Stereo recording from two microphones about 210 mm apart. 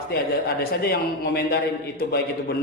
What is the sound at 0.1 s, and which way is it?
A man's voice, 50° left (ahead or behind).